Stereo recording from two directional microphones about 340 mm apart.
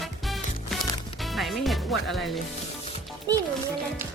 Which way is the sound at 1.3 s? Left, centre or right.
Centre.